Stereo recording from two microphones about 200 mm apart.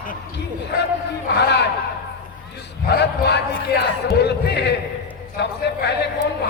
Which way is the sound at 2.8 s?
55° left (ahead or behind).